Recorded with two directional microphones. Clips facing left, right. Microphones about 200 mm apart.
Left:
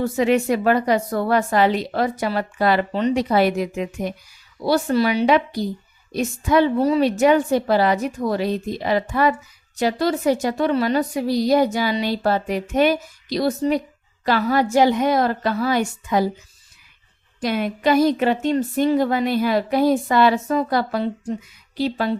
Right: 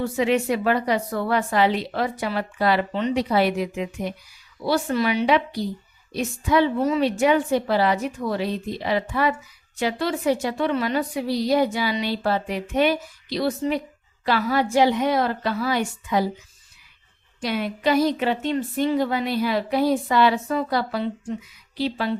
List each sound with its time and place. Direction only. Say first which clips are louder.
0.0 s a woman's voice: left 3 dB; 45° left (ahead or behind)
17.4 s a woman's voice: left 3 dB; 50° left (ahead or behind)